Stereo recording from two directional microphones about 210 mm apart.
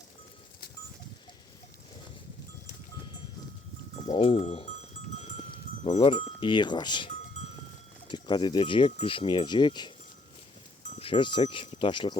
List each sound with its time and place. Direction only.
4.0 s speech: 30° left (ahead or behind)
11.0 s speech: 25° left (ahead or behind)